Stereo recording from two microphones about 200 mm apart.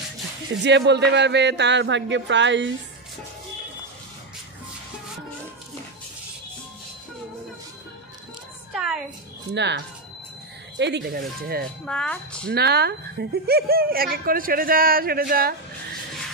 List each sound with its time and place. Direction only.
0.7 s speech: 60° right (ahead or behind)
9.5 s speech: 60° right (ahead or behind)
10.8 s a woman's voice: 55° right (ahead or behind)
11.8 s speech: 5° left (ahead or behind)
12.5 s a woman's voice: 55° right (ahead or behind)